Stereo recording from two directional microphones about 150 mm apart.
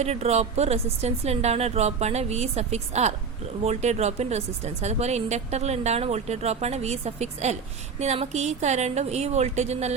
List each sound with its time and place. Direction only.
0.0 s speech: 45° right (ahead or behind)